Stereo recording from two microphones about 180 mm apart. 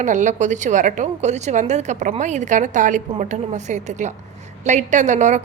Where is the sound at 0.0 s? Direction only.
45° right (ahead or behind).